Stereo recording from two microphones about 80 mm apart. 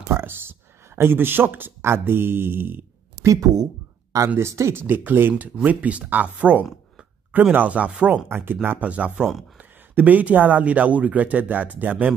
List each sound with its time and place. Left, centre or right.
0.1 s speech: right
3.3 s speech: right; by 8.2 s centre
8.3 s speech: right